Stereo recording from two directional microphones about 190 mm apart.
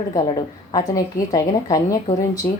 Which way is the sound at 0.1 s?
20° left (ahead or behind).